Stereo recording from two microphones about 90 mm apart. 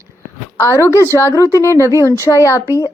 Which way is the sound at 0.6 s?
30° left (ahead or behind).